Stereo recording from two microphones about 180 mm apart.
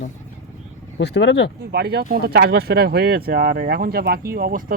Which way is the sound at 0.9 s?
75° left (ahead or behind).